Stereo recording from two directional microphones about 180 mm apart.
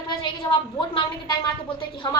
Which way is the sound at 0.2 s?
25° left (ahead or behind).